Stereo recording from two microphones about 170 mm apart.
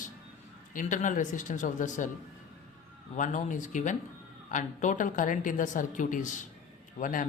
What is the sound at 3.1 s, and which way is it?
Speech, 50° left (ahead or behind).